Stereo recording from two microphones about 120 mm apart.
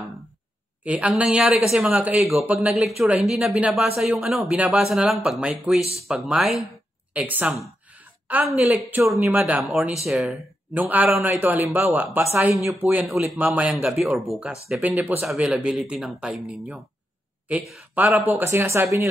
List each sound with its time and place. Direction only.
0.8 s speech: 10° right (ahead or behind)
7.9 s a sound: 15° right (ahead or behind)
9.1 s speech: 15° right (ahead or behind)
9.6 s speech: 5° right (ahead or behind)
10.8 s speech: 15° right (ahead or behind)
17.9 s speech: 15° right (ahead or behind)